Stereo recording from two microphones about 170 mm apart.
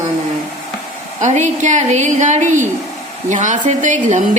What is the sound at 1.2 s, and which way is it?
A woman's voice, 45° right (ahead or behind).